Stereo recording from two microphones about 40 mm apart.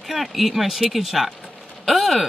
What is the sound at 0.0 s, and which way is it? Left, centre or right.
Speech, centre.